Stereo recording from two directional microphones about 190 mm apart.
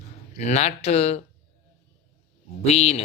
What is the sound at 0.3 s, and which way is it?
Speech, 35° left (ahead or behind).